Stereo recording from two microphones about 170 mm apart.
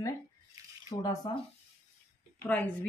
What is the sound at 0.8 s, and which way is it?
Speech, 25° left (ahead or behind).